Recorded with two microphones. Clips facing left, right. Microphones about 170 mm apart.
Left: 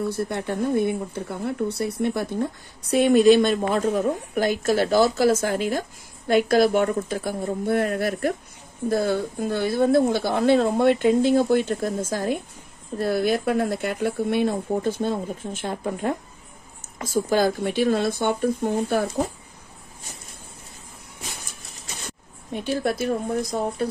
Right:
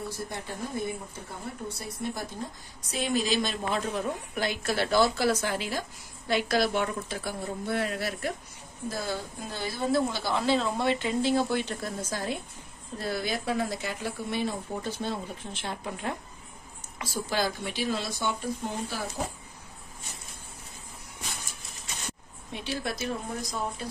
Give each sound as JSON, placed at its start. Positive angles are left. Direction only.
{"t": 0.1, "sound": "speech", "side_deg": 65}
{"t": 22.5, "sound": "speech", "side_deg": 50}